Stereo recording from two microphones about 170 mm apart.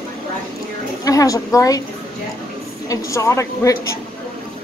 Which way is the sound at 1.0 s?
20° left (ahead or behind).